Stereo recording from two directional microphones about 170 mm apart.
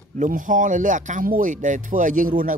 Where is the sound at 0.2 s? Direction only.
50° right (ahead or behind).